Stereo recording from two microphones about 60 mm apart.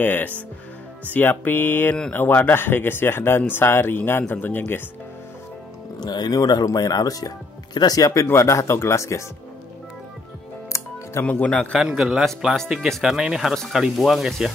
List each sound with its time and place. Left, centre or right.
0.0 s speech: left
6.2 s speech: left
8.3 s speech: left
10.7 s music: left
11.2 s speech: left
11.8 s speech: centre